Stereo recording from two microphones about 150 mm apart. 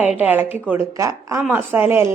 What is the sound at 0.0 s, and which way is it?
A woman's voice, 10° right (ahead or behind).